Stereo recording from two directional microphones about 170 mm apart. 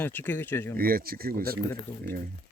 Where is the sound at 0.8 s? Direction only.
60° right (ahead or behind).